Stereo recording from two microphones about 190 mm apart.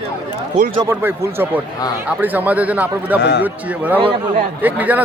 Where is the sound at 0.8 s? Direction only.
15° right (ahead or behind).